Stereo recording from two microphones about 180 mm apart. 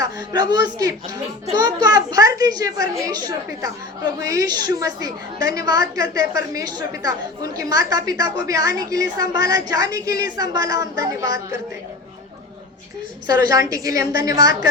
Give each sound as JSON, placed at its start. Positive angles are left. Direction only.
{"t": 0.0, "sound": "a woman's voice", "side_deg": -20}
{"t": 13.2, "sound": "a woman's voice", "side_deg": -20}